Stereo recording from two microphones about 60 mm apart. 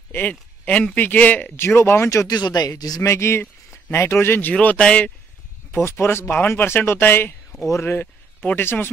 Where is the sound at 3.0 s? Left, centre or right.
Left.